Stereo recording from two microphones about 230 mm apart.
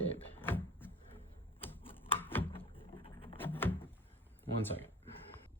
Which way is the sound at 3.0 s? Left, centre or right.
Left.